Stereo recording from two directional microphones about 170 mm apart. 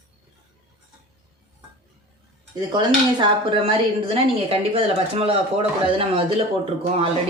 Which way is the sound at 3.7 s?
30° right (ahead or behind).